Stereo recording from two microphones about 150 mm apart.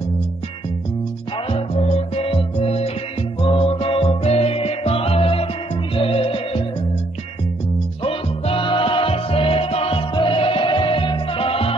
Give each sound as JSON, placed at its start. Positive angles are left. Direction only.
{"t": 1.5, "sound": "music", "side_deg": 45}
{"t": 8.0, "sound": "music", "side_deg": 35}